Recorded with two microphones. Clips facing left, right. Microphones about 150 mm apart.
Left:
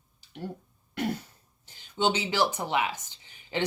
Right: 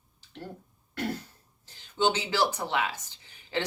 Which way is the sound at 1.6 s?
15° left (ahead or behind).